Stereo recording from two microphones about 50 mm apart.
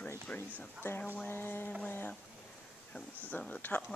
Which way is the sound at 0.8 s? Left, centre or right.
Left.